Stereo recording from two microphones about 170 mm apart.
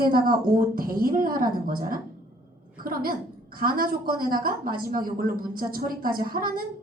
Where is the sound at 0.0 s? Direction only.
60° right (ahead or behind).